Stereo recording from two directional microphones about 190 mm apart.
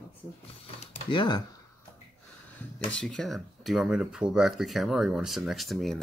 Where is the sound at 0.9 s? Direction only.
25° left (ahead or behind).